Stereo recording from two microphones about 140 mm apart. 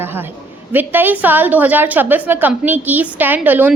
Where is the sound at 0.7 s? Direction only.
15° right (ahead or behind).